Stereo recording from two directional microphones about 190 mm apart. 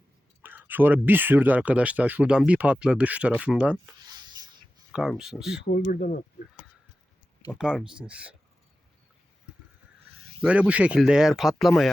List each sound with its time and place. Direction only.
0.4 s a sound: 10° right (ahead or behind)
1.0 s speech: 10° right (ahead or behind)
4.9 s speech: 5° right (ahead or behind)
5.6 s speech: 45° left (ahead or behind)
7.6 s speech: 5° right (ahead or behind)
10.4 s speech: 5° right (ahead or behind)